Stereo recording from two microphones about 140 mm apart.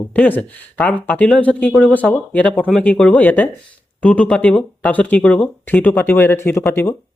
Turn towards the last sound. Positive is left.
turn(degrees=15)  # may be behind; listen again after turning